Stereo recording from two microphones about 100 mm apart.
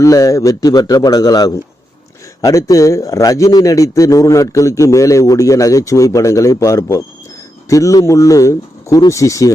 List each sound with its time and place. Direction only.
0.0 s a man's voice: 35° left (ahead or behind)